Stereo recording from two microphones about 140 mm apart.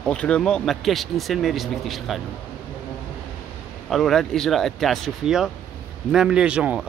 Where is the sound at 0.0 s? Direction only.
10° left (ahead or behind).